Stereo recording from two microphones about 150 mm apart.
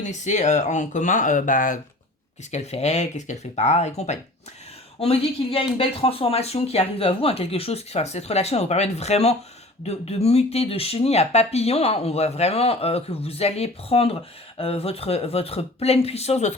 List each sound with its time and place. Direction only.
0.0 s speech: 50° left (ahead or behind)
2.5 s speech: 45° left (ahead or behind)